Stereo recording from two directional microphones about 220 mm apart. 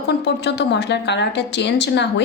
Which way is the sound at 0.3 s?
50° left (ahead or behind).